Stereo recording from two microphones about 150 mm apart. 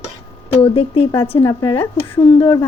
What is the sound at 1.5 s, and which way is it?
Speech, 25° left (ahead or behind).